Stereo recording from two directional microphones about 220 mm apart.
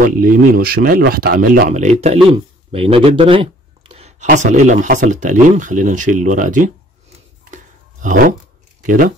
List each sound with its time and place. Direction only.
0.2 s speech: 40° right (ahead or behind)
7.5 s a sound: 35° right (ahead or behind)
8.8 s speech: 40° right (ahead or behind)